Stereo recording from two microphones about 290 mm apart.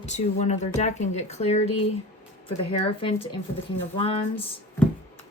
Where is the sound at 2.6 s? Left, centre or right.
Centre.